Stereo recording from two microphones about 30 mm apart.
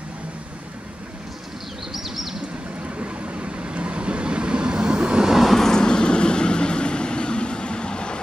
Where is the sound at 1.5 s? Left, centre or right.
Centre.